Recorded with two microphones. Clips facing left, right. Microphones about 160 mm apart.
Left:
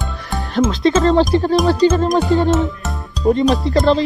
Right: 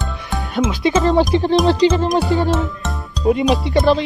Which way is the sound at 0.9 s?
15° right (ahead or behind).